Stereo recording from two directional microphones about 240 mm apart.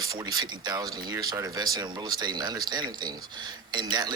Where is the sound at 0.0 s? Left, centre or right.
Centre.